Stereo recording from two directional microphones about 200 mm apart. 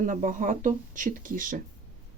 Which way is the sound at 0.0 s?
40° right (ahead or behind).